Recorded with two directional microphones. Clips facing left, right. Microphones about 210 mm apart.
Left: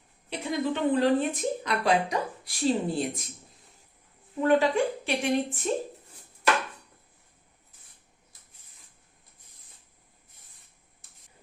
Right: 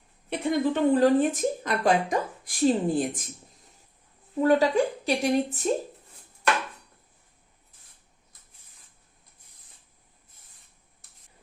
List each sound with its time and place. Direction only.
0.3 s a woman's voice: 45° right (ahead or behind)
4.4 s a woman's voice: 40° right (ahead or behind)